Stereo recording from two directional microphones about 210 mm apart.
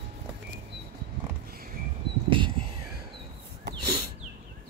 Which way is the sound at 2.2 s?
25° right (ahead or behind).